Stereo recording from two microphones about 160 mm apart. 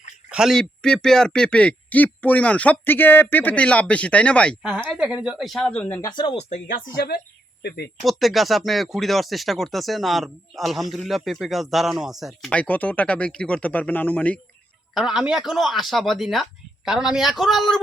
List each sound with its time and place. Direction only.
0.3 s a man's voice: 5° right (ahead or behind)
4.6 s speech: 5° right (ahead or behind)
6.0 s speech: 30° left (ahead or behind)
6.3 s speech: 55° left (ahead or behind)
8.0 s speech: centre (ahead or behind)
14.9 s speech: 5° right (ahead or behind)